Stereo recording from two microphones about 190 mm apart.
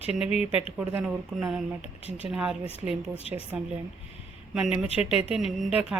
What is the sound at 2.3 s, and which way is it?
Speech, 5° right (ahead or behind).